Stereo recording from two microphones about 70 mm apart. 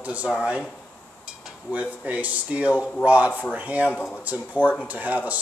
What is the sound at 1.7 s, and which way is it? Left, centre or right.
Speech, centre.